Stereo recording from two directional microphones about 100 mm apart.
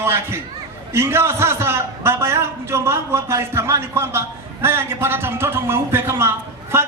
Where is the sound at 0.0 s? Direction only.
25° right (ahead or behind).